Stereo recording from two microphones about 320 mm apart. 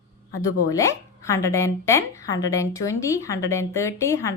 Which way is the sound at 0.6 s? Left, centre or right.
Centre.